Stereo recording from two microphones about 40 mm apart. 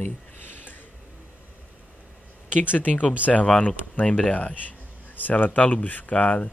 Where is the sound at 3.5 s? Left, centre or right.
Left.